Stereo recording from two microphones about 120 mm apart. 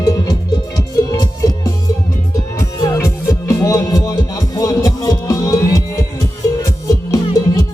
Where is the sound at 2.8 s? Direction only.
25° left (ahead or behind).